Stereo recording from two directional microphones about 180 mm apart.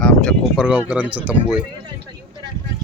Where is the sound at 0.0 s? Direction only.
5° left (ahead or behind).